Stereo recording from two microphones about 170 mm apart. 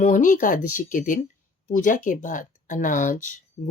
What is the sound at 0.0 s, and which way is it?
Speech, 50° left (ahead or behind).